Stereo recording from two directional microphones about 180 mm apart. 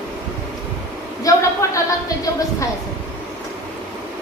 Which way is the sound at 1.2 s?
20° left (ahead or behind).